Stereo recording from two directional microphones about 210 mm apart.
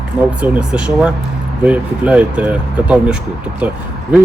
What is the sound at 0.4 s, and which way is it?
Speech, 5° right (ahead or behind).